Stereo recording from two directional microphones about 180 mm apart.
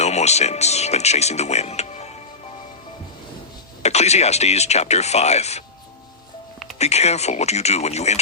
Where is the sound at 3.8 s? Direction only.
35° left (ahead or behind).